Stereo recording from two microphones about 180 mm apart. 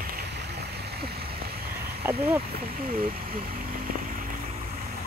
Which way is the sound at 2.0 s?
10° right (ahead or behind).